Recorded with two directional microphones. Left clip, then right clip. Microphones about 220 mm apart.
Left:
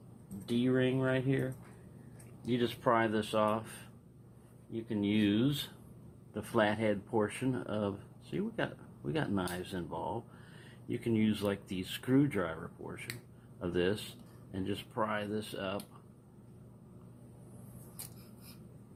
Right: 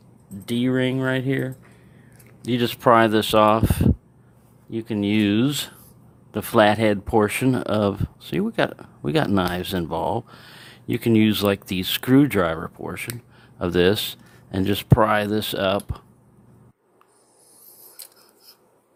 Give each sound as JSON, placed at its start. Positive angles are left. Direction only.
{"t": 0.4, "sound": "speech", "side_deg": -55}
{"t": 4.7, "sound": "speech", "side_deg": -55}